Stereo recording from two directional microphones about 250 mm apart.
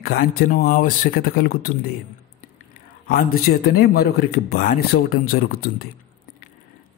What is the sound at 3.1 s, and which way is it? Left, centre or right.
Speech, left.